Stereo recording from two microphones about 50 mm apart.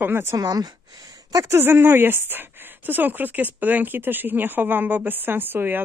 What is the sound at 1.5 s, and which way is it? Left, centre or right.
Speech, right.